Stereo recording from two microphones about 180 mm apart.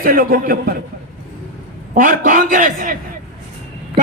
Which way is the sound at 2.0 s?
50° right (ahead or behind).